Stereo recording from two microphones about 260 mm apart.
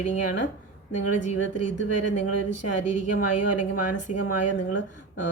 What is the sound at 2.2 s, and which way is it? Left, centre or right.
Speech, left.